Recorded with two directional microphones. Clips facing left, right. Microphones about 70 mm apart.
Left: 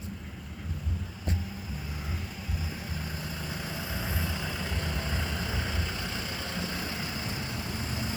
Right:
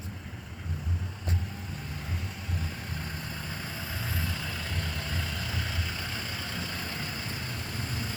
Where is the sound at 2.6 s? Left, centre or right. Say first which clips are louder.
Left 1 dB; centre.